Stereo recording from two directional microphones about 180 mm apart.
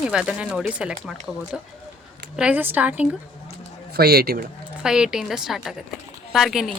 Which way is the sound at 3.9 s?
60° right (ahead or behind).